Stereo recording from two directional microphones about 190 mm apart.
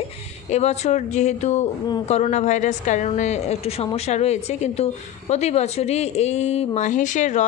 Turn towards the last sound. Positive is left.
turn(degrees=40)  # may be behind; listen again after turning